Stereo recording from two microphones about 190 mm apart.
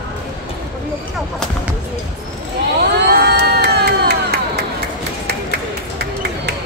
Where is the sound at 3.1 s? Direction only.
60° right (ahead or behind).